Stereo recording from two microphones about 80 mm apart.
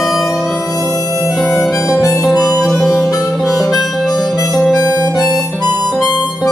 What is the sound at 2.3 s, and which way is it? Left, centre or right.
Music, left.